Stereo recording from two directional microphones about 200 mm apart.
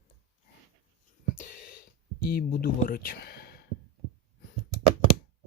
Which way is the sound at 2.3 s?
45° left (ahead or behind).